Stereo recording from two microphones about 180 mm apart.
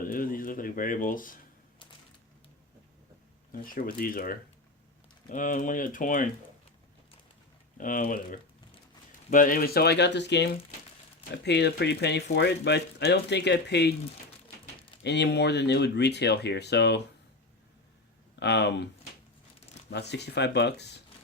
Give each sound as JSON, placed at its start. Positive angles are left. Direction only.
{"t": 0.0, "sound": "a sound", "side_deg": 50}
{"t": 3.5, "sound": "speech", "side_deg": 50}
{"t": 7.8, "sound": "speech", "side_deg": 50}
{"t": 15.0, "sound": "speech", "side_deg": 70}
{"t": 18.3, "sound": "speech", "side_deg": 75}
{"t": 19.9, "sound": "speech", "side_deg": 70}